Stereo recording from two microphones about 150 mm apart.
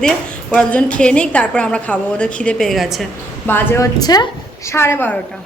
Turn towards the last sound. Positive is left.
turn(degrees=15)  # may be behind; listen again after turning